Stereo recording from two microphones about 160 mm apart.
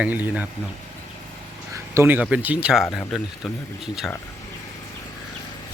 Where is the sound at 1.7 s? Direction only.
20° right (ahead or behind).